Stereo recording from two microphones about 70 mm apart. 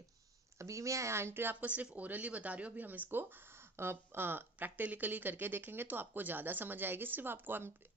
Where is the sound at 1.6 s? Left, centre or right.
Right.